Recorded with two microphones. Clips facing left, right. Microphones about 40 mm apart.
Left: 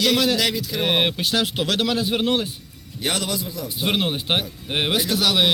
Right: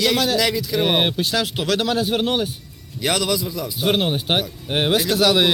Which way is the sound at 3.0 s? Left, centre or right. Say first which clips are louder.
Right 4 dB; right.